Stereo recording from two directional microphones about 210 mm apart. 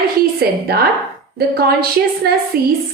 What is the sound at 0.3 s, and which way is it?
A woman's voice, 50° right (ahead or behind).